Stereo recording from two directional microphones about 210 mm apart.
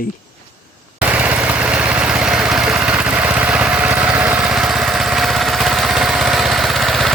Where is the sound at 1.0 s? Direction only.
5° right (ahead or behind).